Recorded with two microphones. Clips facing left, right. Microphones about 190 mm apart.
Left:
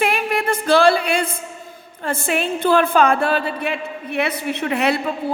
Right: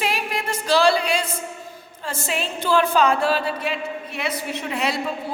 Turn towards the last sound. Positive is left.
turn(degrees=60)  # may be behind; listen again after turning